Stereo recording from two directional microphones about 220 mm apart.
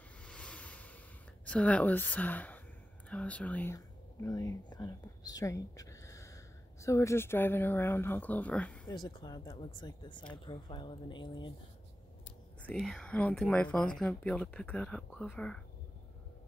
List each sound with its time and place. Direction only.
0.2 s a sound: 5° left (ahead or behind)
1.4 s a woman's voice: 5° left (ahead or behind)
8.8 s speech: 20° left (ahead or behind)
12.6 s speech: centre (ahead or behind)